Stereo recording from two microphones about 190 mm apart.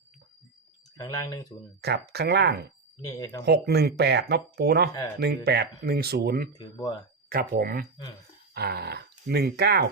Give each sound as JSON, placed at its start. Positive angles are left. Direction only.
{"t": 0.9, "sound": "speech", "side_deg": 20}
{"t": 1.8, "sound": "speech", "side_deg": -60}
{"t": 3.0, "sound": "speech", "side_deg": 20}
{"t": 3.4, "sound": "speech", "side_deg": -60}
{"t": 6.6, "sound": "speech", "side_deg": 20}
{"t": 7.3, "sound": "speech", "side_deg": -50}